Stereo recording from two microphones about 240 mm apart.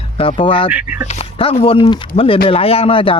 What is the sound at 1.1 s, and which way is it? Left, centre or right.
Speech, left.